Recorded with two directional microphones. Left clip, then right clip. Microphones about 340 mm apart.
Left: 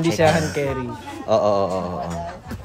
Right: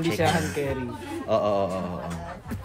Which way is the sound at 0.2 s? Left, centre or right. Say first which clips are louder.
Left 8 dB; left.